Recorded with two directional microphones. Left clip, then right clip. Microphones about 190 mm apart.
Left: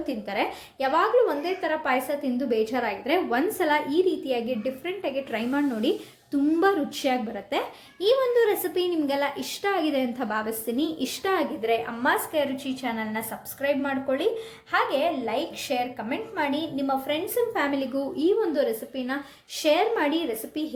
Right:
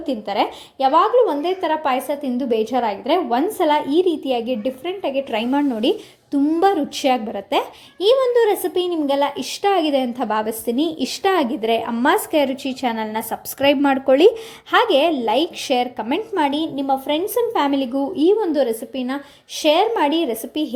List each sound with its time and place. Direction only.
0.1 s a woman's voice: 25° right (ahead or behind)